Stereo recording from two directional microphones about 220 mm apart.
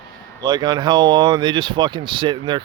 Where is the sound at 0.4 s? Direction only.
20° right (ahead or behind).